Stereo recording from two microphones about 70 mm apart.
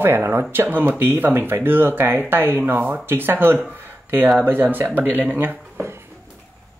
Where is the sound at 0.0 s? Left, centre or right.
Right.